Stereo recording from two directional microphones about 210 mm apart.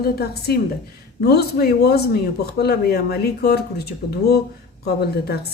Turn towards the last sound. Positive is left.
turn(degrees=50)  # may be behind; listen again after turning